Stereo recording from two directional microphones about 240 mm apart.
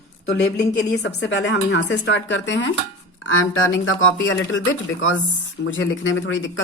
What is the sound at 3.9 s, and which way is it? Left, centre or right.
Speech, left.